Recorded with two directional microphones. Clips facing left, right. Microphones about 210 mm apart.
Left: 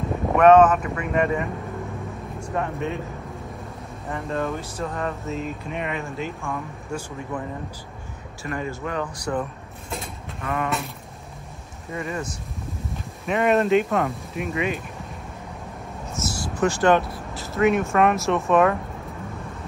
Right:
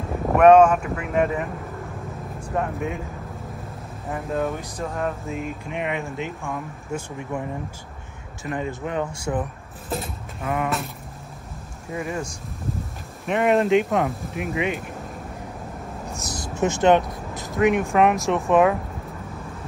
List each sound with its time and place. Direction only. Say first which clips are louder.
0.3 s speech: right 1 dB; 10° right (ahead or behind)
2.5 s speech: right 1 dB; 5° right (ahead or behind)
4.1 s speech: right 1 dB; 5° right (ahead or behind)
8.4 s speech: right 1 dB; centre (ahead or behind)
8.8 s speech: right 1 dB; 25° right (ahead or behind)
9.8 s a sound: right 4 dB; centre (ahead or behind)
11.9 s speech: right 1 dB; 5° right (ahead or behind)
12.9 s a sound: left 1 dB; centre (ahead or behind)
13.5 s speech: right 1 dB; 15° right (ahead or behind)
16.2 s speech: left 1 dB; 15° right (ahead or behind)